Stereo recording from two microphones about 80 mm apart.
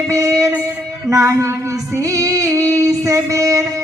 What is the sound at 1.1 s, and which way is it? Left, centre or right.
Female singing, right.